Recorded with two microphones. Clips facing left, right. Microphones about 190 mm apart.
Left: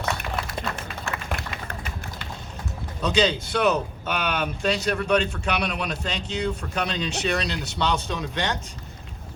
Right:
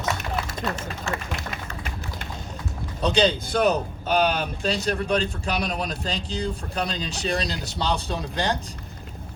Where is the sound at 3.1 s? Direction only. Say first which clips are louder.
Even; 60° right (ahead or behind).